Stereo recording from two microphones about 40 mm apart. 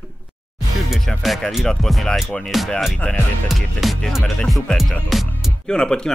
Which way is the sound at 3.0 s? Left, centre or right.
Left.